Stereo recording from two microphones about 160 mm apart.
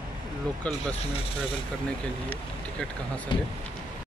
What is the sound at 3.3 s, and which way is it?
Speech, 30° left (ahead or behind).